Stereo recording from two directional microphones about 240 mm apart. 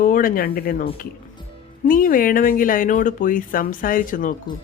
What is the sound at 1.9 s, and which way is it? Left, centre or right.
Speech, left.